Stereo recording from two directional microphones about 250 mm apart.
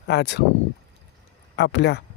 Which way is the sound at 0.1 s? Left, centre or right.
Left.